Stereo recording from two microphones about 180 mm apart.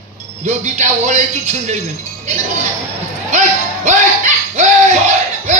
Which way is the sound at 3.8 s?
40° right (ahead or behind).